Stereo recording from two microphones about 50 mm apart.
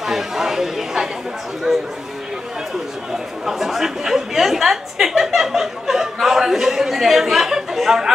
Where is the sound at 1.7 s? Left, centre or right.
Centre.